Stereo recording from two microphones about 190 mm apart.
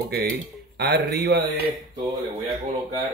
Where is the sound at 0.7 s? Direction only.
60° right (ahead or behind).